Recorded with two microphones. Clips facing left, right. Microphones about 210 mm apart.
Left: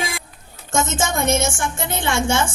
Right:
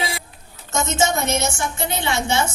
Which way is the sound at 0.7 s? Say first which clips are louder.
Right 1 dB; 50° left (ahead or behind).